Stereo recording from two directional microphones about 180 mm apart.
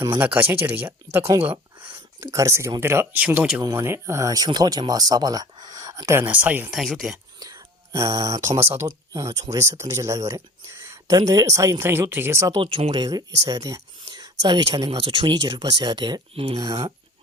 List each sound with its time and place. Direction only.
0.0 s speech: 15° right (ahead or behind)
2.2 s speech: 15° right (ahead or behind); by 7.2 s centre (ahead or behind)
7.9 s speech: 20° right (ahead or behind)
12.5 s speech: 30° right (ahead or behind)
16.6 s speech: 20° right (ahead or behind)